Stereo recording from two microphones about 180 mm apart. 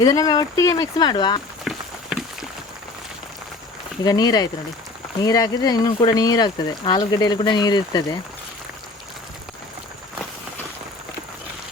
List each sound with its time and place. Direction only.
0.0 s speech: 20° left (ahead or behind)
1.7 s run: 5° right (ahead or behind)
2.1 s a sound: 5° right (ahead or behind)
4.0 s speech: 20° left (ahead or behind)